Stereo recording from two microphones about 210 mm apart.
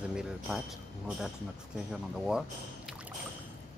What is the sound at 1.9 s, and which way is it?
Speech, 5° right (ahead or behind).